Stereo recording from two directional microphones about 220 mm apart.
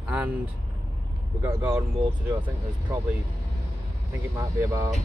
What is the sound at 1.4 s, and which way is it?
Speech, 10° right (ahead or behind).